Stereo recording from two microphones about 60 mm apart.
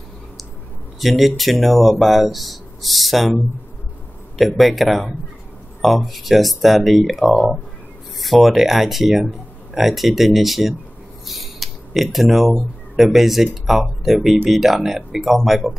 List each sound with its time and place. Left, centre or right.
0.9 s speech: centre
4.4 s speech: centre